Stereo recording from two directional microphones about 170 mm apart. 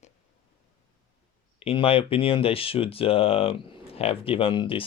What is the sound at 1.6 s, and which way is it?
Speech, 35° left (ahead or behind).